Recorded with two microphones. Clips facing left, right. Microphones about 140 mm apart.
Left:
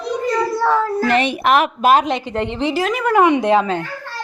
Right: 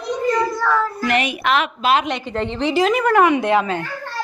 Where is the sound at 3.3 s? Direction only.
25° left (ahead or behind).